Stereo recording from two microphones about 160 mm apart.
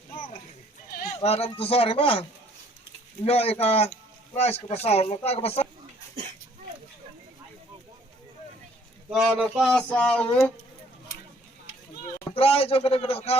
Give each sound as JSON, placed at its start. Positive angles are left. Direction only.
{"t": 1.2, "sound": "speech", "side_deg": 40}
{"t": 3.2, "sound": "speech", "side_deg": 40}
{"t": 9.0, "sound": "speech", "side_deg": -5}
{"t": 12.3, "sound": "speech", "side_deg": 35}